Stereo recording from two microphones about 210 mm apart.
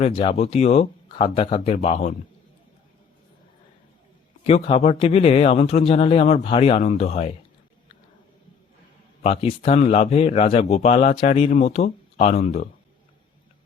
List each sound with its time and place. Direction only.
0.0 s speech: 25° left (ahead or behind)
4.4 s speech: 25° left (ahead or behind)
9.2 s speech: 30° left (ahead or behind)